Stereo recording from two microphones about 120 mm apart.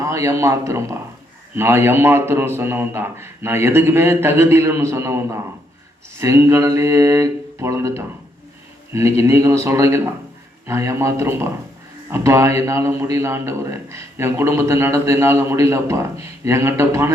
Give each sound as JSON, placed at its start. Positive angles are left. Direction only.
{"t": 0.0, "sound": "a man's voice", "side_deg": -25}